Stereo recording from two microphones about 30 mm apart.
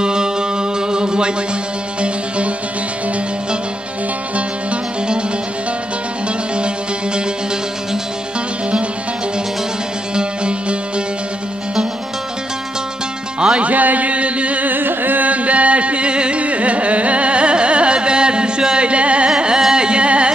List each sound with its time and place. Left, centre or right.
0.0 s music: right
2.0 s music: right
10.1 s music: right
13.6 s a sound: right
14.6 s music: right
15.3 s a sound: right
16.3 s carnatic music: right
18.8 s music: right
19.3 s carnatic music: right
19.7 s music: right